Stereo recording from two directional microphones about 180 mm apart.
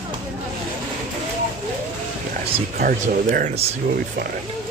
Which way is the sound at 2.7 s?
50° right (ahead or behind).